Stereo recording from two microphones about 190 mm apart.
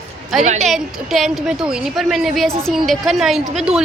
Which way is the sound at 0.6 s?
Centre (ahead or behind).